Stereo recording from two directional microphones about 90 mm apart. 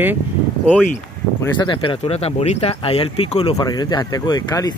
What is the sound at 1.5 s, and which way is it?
Speech, 65° left (ahead or behind).